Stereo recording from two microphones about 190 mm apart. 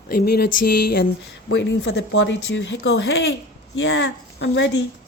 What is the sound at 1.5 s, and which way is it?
Speech, 70° left (ahead or behind).